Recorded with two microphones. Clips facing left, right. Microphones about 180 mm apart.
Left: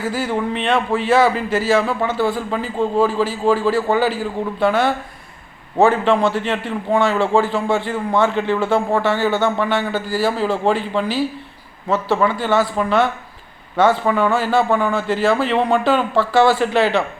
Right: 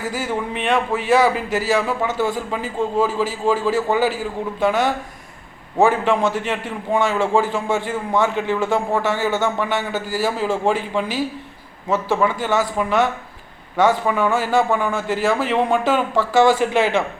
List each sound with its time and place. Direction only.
0.1 s a man's voice: 10° right (ahead or behind)